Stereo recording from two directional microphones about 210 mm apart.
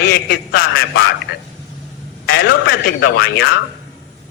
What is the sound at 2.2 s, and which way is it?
A man's voice, 45° left (ahead or behind).